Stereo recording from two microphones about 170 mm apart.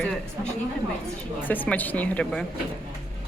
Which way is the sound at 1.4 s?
10° left (ahead or behind).